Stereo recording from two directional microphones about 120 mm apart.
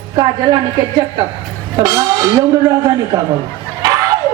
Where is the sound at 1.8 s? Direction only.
30° right (ahead or behind).